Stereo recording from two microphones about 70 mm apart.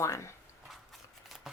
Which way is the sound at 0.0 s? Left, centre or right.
Left.